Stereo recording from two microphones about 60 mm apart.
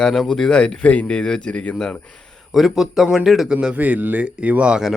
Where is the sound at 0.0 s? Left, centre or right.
Centre.